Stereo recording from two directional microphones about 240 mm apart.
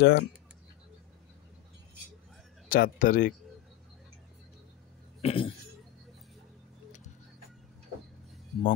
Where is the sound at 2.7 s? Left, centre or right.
Left.